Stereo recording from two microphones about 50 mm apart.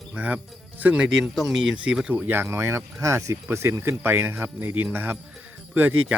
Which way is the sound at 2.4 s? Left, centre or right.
Right.